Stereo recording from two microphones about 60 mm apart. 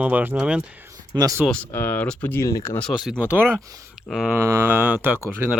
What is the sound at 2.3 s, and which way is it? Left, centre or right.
Speech, left.